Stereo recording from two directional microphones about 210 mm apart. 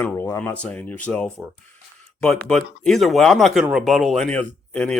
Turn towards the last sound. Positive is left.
turn(degrees=5)  # may be behind; listen again after turning